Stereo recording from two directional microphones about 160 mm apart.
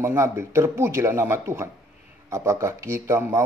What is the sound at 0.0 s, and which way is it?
A man's voice, 15° right (ahead or behind).